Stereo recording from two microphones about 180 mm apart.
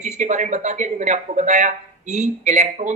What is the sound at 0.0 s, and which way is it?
Speech, 40° right (ahead or behind).